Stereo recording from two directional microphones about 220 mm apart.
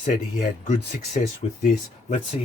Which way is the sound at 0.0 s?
35° left (ahead or behind).